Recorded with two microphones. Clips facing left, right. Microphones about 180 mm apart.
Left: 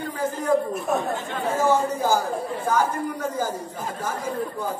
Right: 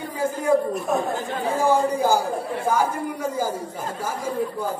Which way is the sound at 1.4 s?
10° right (ahead or behind).